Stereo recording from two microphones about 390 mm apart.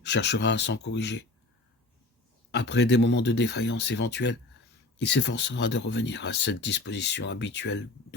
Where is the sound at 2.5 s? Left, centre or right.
Left.